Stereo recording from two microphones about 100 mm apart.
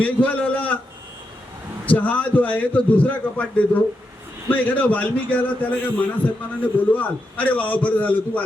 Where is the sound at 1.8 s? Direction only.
15° left (ahead or behind).